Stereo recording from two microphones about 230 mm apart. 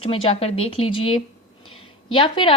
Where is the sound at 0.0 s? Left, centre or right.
Left.